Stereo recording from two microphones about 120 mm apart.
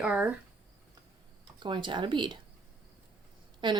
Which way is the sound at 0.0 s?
10° right (ahead or behind).